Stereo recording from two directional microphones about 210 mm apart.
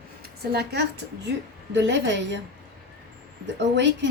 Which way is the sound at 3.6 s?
55° right (ahead or behind).